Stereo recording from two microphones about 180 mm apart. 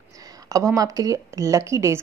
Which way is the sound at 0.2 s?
20° right (ahead or behind).